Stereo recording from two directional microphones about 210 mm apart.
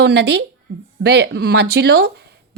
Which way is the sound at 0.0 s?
55° right (ahead or behind).